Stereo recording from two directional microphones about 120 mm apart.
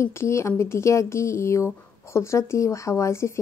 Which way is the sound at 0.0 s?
25° left (ahead or behind).